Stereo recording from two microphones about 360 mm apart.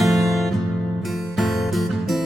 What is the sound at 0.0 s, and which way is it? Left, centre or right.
Music, centre.